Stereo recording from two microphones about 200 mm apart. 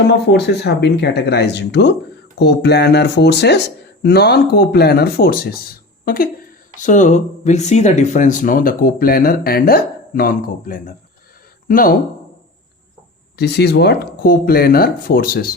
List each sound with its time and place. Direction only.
0.1 s speech: 55° left (ahead or behind)
6.7 s speech: 40° left (ahead or behind)
13.3 s speech: 55° left (ahead or behind)